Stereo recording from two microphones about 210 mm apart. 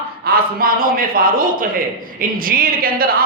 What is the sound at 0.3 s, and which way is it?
A man's voice, 45° right (ahead or behind).